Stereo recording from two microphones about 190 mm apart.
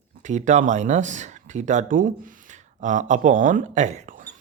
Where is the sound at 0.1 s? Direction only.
40° right (ahead or behind).